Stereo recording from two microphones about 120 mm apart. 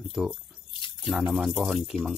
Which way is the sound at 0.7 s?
40° left (ahead or behind).